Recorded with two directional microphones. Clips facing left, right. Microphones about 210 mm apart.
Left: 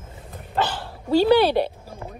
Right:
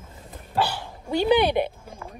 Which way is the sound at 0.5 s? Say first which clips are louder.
Left 1 dB; 10° right (ahead or behind).